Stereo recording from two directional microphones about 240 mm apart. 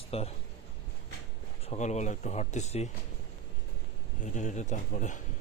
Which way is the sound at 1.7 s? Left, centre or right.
Left.